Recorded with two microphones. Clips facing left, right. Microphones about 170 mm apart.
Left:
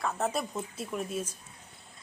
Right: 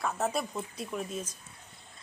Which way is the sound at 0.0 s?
Centre (ahead or behind).